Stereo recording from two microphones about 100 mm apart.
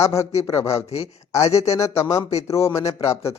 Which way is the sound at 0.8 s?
90° left.